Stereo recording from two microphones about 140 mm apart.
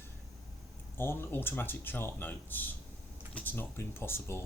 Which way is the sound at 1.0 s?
15° left (ahead or behind).